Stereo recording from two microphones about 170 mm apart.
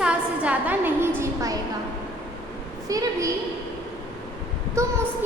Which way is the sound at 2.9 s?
20° right (ahead or behind).